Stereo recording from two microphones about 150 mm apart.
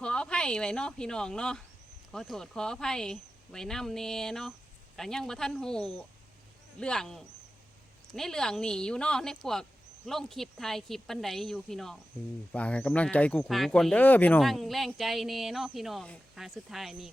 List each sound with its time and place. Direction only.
0.0 s speech: 5° left (ahead or behind)